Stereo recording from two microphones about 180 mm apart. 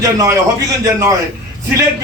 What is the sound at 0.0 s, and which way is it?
Speech, 20° right (ahead or behind).